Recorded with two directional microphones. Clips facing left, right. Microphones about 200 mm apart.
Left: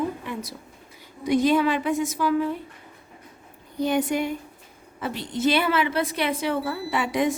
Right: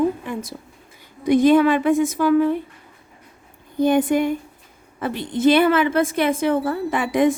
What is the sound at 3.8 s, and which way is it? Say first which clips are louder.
A woman's voice: right 6 dB; 50° right (ahead or behind).